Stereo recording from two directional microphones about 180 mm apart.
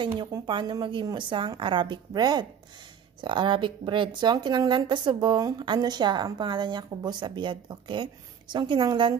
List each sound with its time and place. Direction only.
0.0 s speech: 25° right (ahead or behind)